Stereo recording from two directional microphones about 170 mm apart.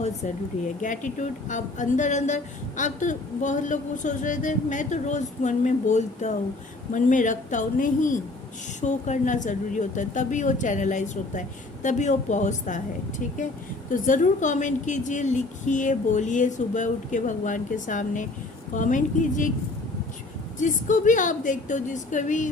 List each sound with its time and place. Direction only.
0.8 s speech: 50° left (ahead or behind)
20.6 s speech: 50° left (ahead or behind)